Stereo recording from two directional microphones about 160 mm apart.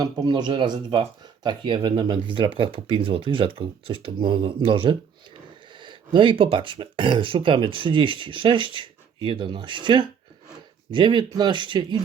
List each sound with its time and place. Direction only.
0.0 s speech: 25° right (ahead or behind)